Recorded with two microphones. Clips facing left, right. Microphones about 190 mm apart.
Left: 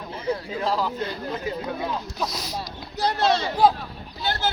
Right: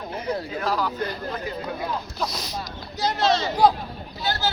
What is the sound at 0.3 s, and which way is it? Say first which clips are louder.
Speech: left 1 dB; 25° left (ahead or behind).